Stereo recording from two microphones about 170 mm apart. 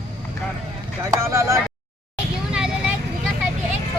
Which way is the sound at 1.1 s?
15° right (ahead or behind).